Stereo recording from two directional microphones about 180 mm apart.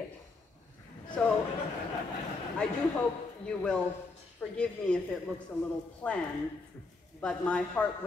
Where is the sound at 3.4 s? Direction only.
5° left (ahead or behind).